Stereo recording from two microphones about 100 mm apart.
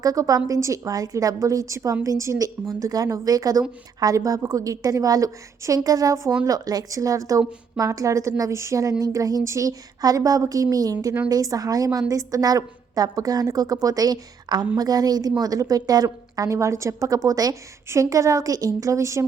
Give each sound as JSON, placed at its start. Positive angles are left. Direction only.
{"t": 0.0, "sound": "a woman's voice", "side_deg": -35}